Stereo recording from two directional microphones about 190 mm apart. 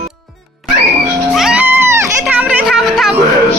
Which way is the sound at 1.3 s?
Centre (ahead or behind).